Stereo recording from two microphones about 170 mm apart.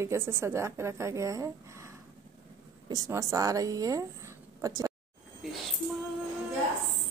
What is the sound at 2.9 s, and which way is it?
A woman's voice, 20° right (ahead or behind).